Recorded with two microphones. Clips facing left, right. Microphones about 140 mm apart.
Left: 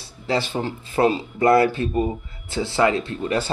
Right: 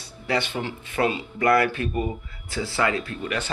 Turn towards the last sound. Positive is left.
turn(degrees=30)  # may be behind; listen again after turning